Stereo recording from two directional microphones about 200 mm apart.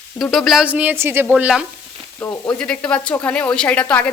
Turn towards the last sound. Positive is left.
turn(degrees=10)  # may be behind; listen again after turning